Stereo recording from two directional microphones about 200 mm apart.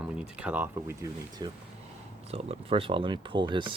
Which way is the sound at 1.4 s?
20° right (ahead or behind).